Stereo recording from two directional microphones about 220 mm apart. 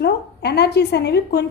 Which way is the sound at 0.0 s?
50° left (ahead or behind).